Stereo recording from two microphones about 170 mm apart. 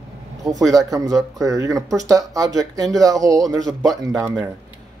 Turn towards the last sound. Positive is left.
turn(degrees=-20)  # may be behind; listen again after turning